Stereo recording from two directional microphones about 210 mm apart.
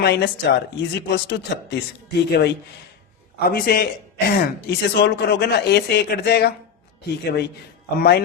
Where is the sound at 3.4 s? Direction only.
45° left (ahead or behind).